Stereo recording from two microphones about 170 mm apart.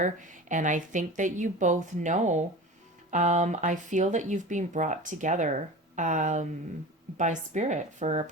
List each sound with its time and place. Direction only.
0.0 s speech: 50° right (ahead or behind)